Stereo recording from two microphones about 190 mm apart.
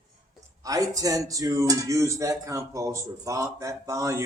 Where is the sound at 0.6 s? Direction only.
20° right (ahead or behind).